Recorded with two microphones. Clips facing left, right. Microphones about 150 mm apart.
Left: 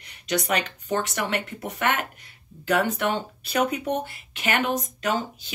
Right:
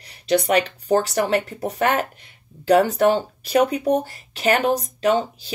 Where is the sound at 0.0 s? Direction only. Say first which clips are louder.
Right 7 dB; 35° right (ahead or behind).